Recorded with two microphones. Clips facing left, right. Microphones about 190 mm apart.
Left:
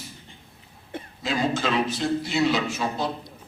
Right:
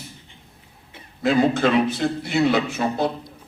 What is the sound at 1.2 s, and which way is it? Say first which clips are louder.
A man's voice: right 7 dB; 60° right (ahead or behind).